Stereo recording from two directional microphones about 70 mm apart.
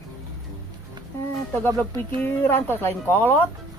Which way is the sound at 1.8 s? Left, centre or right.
Left.